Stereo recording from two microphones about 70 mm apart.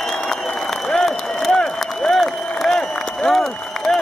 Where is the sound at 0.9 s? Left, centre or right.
Centre.